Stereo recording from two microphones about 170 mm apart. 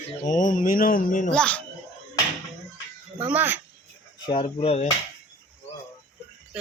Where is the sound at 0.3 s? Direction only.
50° left (ahead or behind).